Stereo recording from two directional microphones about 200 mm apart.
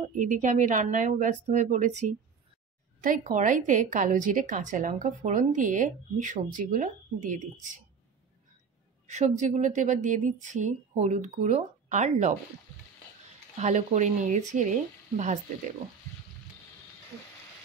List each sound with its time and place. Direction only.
0.1 s a woman's voice: 40° right (ahead or behind)
9.1 s a woman's voice: 35° right (ahead or behind)
13.6 s a woman's voice: 35° right (ahead or behind)